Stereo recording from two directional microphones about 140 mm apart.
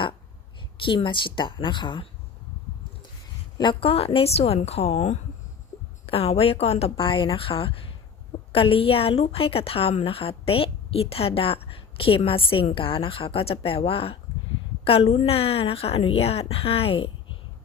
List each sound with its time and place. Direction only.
0.9 s speech: 35° left (ahead or behind)
3.6 s a woman's voice: 40° left (ahead or behind)